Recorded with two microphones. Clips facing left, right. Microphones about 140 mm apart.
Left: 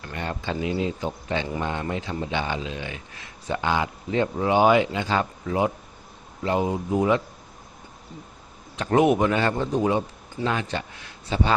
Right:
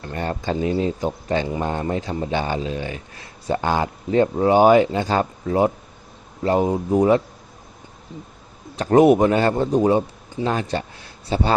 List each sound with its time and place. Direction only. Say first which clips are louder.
0.0 s speech: right 5 dB; 35° right (ahead or behind)
8.7 s speech: right 6 dB; 35° right (ahead or behind)